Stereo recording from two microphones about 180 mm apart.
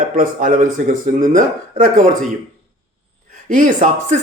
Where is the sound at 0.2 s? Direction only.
50° right (ahead or behind).